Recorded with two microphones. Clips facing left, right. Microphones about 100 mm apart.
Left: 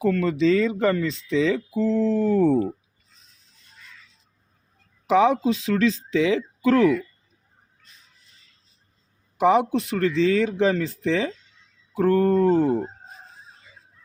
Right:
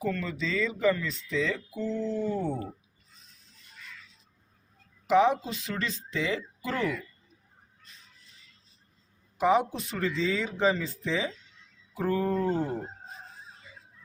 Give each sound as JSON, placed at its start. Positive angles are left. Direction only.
{"t": 0.0, "sound": "speech", "side_deg": 90}
{"t": 5.0, "sound": "speech", "side_deg": 90}
{"t": 9.4, "sound": "speech", "side_deg": 75}
{"t": 11.9, "sound": "a sound", "side_deg": 65}